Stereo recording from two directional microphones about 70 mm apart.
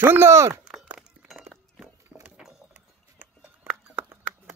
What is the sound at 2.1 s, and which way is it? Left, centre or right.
Horse, right.